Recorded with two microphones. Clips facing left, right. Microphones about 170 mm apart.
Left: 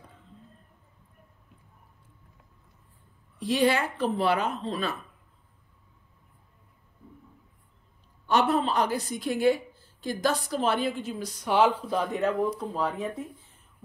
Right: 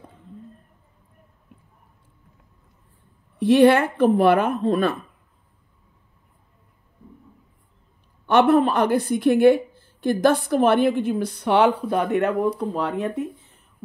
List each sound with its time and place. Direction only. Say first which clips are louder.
3.3 s a woman's voice: right 10 dB; 60° right (ahead or behind)
8.3 s a woman's voice: right 8 dB; 55° right (ahead or behind)